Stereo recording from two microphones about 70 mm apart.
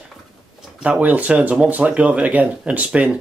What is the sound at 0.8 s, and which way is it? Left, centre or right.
Speech, right.